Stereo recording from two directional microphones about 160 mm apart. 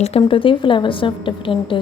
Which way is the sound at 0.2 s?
30° left (ahead or behind).